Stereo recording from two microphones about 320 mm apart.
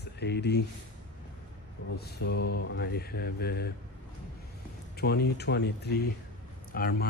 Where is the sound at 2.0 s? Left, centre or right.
Left.